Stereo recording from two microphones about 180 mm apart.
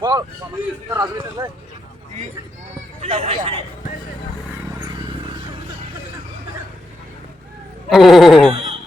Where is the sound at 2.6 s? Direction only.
35° right (ahead or behind).